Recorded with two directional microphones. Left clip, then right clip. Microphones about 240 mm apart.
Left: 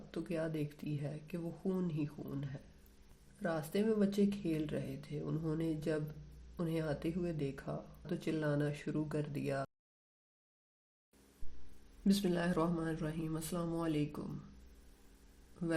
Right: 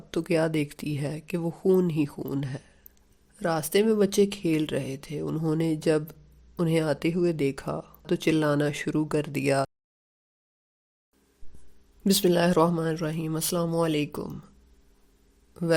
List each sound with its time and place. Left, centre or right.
0.1 s speech: right
12.0 s speech: right